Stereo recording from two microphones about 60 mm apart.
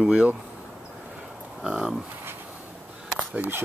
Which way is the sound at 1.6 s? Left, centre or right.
Centre.